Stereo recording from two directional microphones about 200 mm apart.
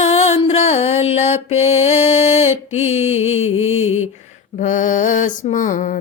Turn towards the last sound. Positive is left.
turn(degrees=40)  # may be behind; listen again after turning